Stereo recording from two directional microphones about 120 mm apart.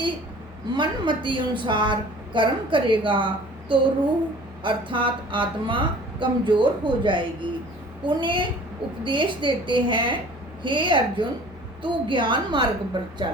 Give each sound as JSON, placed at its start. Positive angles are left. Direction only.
{"t": 0.7, "sound": "a woman's voice", "side_deg": -40}